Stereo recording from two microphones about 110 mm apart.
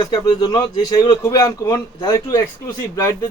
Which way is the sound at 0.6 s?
45° left (ahead or behind).